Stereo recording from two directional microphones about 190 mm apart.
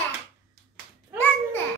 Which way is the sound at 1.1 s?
10° left (ahead or behind).